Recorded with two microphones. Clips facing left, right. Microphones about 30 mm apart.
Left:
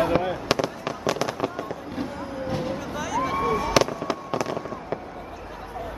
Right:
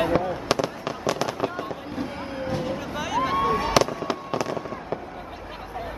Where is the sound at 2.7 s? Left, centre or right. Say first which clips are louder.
Right 1 dB; centre.